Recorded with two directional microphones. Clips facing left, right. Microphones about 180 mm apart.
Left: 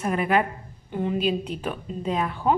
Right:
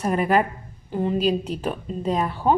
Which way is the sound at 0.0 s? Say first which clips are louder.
Right 2 dB; 40° right (ahead or behind).